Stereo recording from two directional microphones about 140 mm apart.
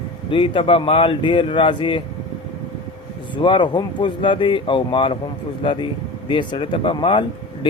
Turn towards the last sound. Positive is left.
turn(degrees=35)  # may be behind; listen again after turning